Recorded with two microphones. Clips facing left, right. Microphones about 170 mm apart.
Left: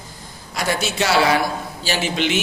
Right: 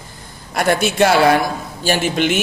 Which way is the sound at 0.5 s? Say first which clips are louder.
Right 6 dB; 55° right (ahead or behind).